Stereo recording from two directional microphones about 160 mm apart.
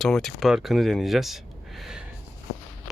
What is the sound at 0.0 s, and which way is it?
Speech, centre (ahead or behind).